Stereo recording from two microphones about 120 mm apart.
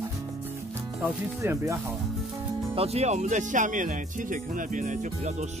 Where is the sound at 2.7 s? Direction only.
60° right (ahead or behind); by 5.5 s 80° right.